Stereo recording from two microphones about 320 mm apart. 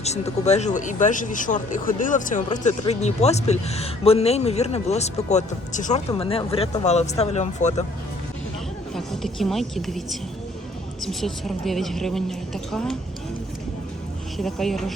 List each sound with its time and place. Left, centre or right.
0.0 s speech: left
9.0 s a woman's voice: centre
14.3 s a woman's voice: centre